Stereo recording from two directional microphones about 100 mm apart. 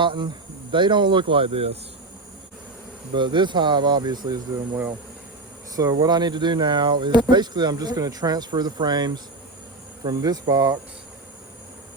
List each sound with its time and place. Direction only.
0.0 s speech: 55° right (ahead or behind); by 1.8 s 75° right (ahead or behind)
3.2 s speech: 50° right (ahead or behind)
5.7 s speech: 40° right (ahead or behind)